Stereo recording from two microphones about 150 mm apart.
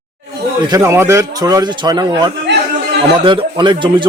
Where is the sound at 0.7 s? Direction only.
20° right (ahead or behind).